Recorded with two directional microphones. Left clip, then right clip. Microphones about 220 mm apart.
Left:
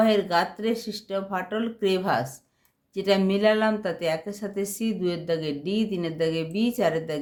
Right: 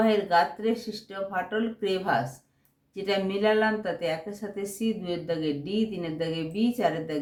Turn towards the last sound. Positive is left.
turn(degrees=50)  # may be behind; listen again after turning